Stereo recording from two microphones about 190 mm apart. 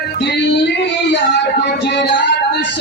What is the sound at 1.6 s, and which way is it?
Music, 60° left (ahead or behind).